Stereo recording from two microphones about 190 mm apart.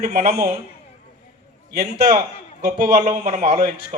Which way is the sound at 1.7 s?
55° right (ahead or behind).